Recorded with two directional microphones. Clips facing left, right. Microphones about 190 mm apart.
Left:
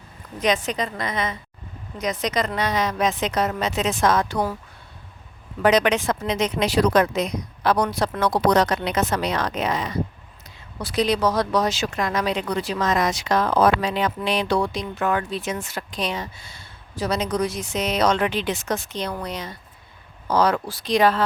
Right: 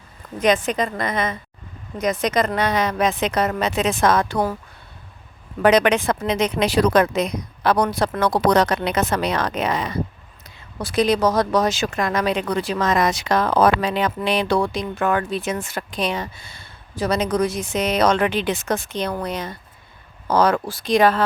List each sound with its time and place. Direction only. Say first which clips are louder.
0.4 s speech: right 4 dB; 50° right (ahead or behind)
5.6 s speech: right 3 dB; 60° right (ahead or behind)
10.8 s speech: right 3 dB; 50° right (ahead or behind)